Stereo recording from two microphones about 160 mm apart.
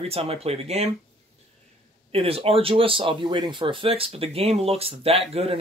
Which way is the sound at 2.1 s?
35° right (ahead or behind).